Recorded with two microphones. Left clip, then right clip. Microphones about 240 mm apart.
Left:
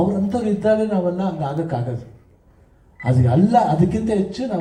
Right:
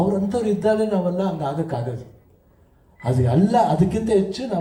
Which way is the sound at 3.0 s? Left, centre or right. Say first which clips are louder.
Left 1 dB; right.